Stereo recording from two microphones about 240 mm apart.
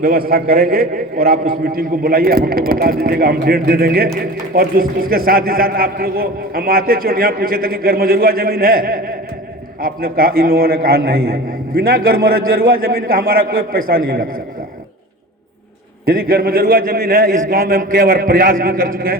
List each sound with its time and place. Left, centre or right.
0.0 s a man's voice: right
16.0 s a man's voice: right